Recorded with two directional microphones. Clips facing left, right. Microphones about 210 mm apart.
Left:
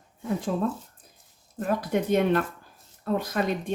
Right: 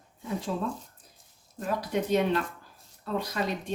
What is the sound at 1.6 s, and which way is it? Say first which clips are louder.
Speech: left 4 dB; 55° left (ahead or behind).